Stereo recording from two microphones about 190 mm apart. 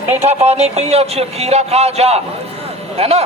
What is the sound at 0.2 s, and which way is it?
A man's voice, 35° right (ahead or behind).